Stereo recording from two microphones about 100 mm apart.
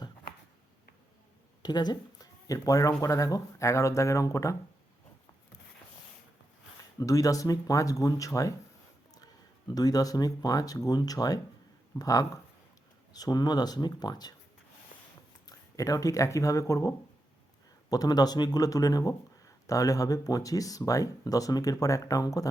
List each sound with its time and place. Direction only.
1.6 s speech: 45° left (ahead or behind)
7.0 s speech: 35° left (ahead or behind)
9.7 s speech: 40° left (ahead or behind)
15.4 s speech: 35° left (ahead or behind)